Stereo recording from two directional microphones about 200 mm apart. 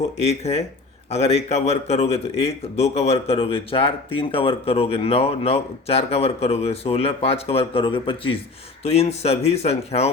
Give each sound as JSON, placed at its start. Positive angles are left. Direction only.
{"t": 0.2, "sound": "speech", "side_deg": 35}